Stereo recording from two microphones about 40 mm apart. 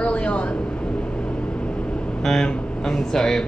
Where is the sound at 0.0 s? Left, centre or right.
Left.